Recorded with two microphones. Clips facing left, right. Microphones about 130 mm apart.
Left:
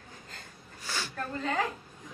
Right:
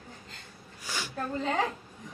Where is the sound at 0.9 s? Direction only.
15° right (ahead or behind).